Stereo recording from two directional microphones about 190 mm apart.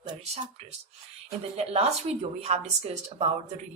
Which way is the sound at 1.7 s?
35° right (ahead or behind).